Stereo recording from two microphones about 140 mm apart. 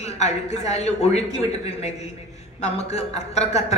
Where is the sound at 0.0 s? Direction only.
50° left (ahead or behind).